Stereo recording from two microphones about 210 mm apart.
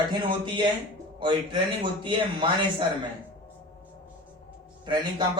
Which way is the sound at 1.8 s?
20° right (ahead or behind).